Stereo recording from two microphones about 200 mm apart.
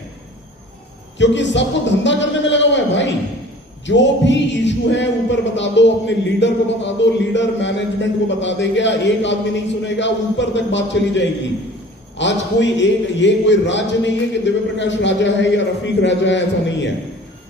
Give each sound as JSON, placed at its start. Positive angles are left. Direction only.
{"t": 1.2, "sound": "speech", "side_deg": 65}